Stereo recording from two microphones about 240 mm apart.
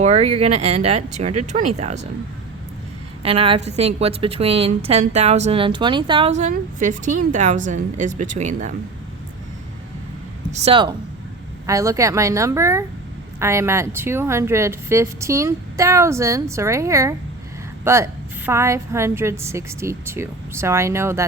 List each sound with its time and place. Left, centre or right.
0.0 s a woman's voice: right
3.2 s a woman's voice: right
10.5 s a woman's voice: right